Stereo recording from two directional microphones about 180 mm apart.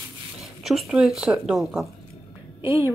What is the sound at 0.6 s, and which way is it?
A woman's voice, centre (ahead or behind).